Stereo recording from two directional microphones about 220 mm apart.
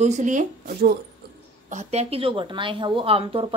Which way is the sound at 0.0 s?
35° right (ahead or behind).